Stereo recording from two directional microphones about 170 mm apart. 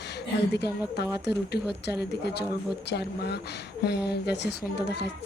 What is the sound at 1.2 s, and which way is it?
A child's voice, 80° left.